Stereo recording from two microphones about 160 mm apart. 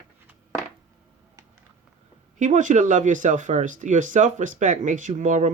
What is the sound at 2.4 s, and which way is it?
Speech, 50° right (ahead or behind).